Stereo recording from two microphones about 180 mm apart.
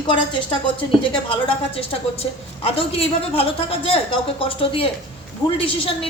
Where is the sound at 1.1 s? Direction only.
30° left (ahead or behind).